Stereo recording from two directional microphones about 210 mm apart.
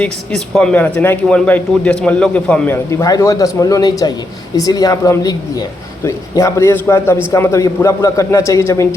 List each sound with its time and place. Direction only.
0.0 s a man's voice: 5° left (ahead or behind)